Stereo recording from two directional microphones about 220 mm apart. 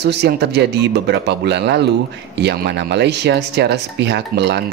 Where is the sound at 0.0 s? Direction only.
50° right (ahead or behind).